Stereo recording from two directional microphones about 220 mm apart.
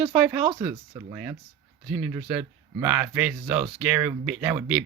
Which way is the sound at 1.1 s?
10° right (ahead or behind).